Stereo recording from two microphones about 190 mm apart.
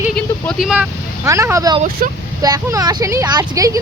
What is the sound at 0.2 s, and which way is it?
Speech, centre (ahead or behind).